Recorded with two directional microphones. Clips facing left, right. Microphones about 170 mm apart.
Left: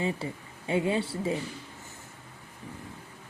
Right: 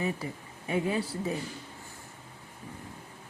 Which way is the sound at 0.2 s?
25° left (ahead or behind).